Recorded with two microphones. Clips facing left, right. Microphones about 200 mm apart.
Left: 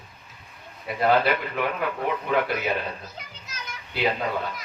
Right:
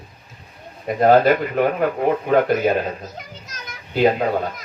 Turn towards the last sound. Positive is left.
turn(degrees=-45)  # may be behind; listen again after turning